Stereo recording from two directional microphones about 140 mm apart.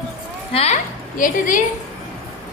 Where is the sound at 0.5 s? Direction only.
45° left (ahead or behind).